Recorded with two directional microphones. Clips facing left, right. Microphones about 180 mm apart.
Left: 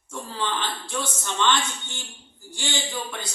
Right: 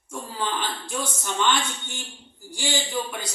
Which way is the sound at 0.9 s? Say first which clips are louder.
Even; 10° right (ahead or behind).